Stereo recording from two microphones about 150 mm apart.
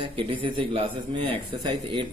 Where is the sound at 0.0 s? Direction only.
35° right (ahead or behind).